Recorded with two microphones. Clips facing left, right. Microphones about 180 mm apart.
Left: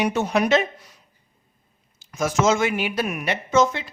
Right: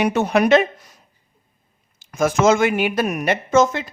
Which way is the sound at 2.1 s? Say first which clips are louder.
Right 4 dB; 55° right (ahead or behind).